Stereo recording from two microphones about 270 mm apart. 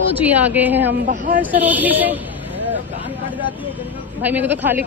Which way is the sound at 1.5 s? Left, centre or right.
Centre.